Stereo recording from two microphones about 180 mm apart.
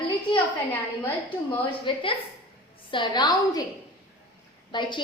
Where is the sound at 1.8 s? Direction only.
30° left (ahead or behind).